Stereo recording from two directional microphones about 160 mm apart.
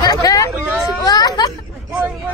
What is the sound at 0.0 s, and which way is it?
Hubbub, 25° left (ahead or behind).